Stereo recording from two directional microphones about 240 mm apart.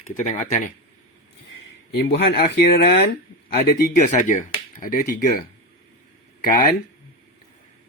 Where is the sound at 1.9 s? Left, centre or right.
Left.